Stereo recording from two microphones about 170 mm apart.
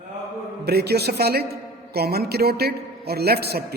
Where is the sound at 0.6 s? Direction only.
70° right (ahead or behind).